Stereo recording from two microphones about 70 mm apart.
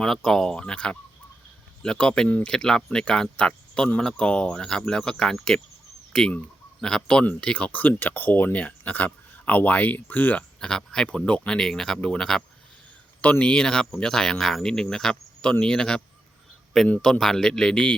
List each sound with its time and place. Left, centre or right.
0.0 s speech: centre; by 10.4 s left
10.6 s speech: centre
17.0 s speech: centre